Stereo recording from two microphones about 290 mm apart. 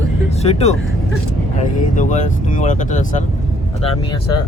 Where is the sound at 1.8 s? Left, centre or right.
Left.